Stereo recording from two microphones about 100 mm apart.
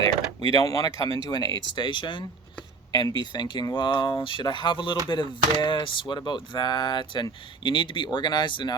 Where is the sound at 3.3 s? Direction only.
50° left (ahead or behind).